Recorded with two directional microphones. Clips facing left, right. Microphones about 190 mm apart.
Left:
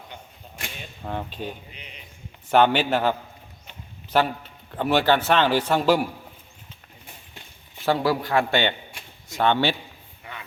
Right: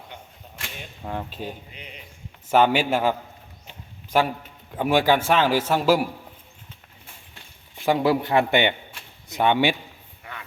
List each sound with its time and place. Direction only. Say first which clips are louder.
1.0 s a man's voice: even; 5° right (ahead or behind)
7.9 s a man's voice: right 2 dB; 20° right (ahead or behind)